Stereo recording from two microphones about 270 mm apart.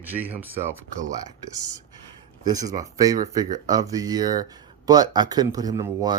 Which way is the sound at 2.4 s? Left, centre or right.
Centre.